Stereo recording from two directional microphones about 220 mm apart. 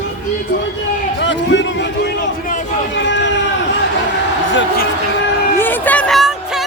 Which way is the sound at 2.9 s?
55° left (ahead or behind).